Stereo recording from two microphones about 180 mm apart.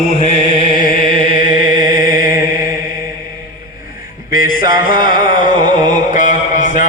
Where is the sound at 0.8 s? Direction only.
50° left (ahead or behind).